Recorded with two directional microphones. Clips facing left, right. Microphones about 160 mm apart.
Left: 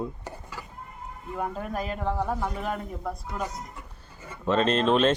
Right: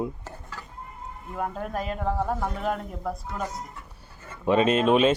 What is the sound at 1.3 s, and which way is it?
Speech, centre (ahead or behind).